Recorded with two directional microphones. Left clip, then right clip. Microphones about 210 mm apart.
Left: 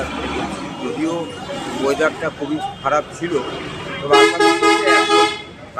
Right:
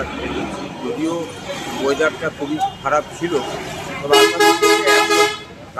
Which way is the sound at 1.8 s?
Centre (ahead or behind).